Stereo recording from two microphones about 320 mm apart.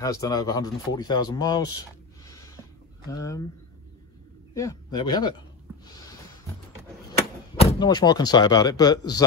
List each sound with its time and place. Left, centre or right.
0.0 s speech: centre
4.6 s speech: centre
7.8 s speech: centre